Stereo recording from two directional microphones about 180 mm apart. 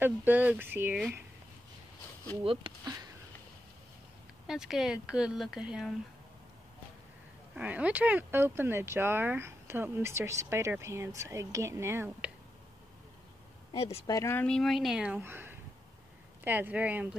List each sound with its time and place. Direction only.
0.0 s speech: 10° right (ahead or behind)
2.4 s speech: 30° right (ahead or behind)
4.5 s speech: centre (ahead or behind)
7.5 s speech: 10° right (ahead or behind)
14.0 s speech: 15° left (ahead or behind); by 17.2 s 10° right (ahead or behind)